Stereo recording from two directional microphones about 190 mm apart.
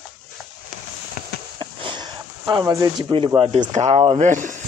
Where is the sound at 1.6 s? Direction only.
25° right (ahead or behind).